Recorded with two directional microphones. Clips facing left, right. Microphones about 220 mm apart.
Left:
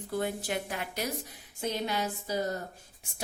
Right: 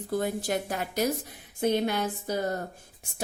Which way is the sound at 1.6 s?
55° right (ahead or behind).